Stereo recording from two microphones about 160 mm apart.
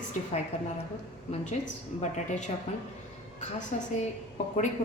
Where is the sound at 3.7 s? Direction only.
45° left (ahead or behind).